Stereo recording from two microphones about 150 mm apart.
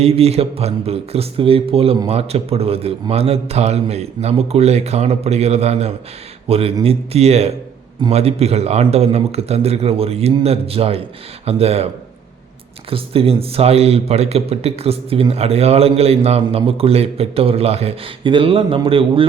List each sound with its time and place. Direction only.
0.0 s a man's voice: 45° right (ahead or behind)
12.9 s a man's voice: 40° right (ahead or behind)